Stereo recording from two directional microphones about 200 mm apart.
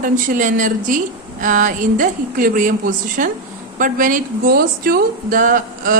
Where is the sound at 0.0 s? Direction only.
40° right (ahead or behind).